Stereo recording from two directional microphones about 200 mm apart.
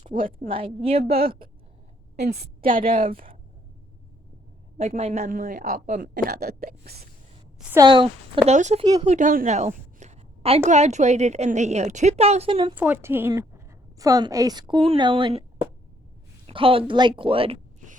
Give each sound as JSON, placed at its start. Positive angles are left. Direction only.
{"t": 0.0, "sound": "speech", "side_deg": -45}
{"t": 0.4, "sound": "a woman's voice", "side_deg": -30}
{"t": 2.3, "sound": "a man's voice", "side_deg": -50}
{"t": 4.8, "sound": "a man's voice", "side_deg": -35}
{"t": 7.9, "sound": "a woman's voice", "side_deg": -25}
{"t": 12.7, "sound": "a woman's voice", "side_deg": -10}
{"t": 16.5, "sound": "a woman's voice", "side_deg": -25}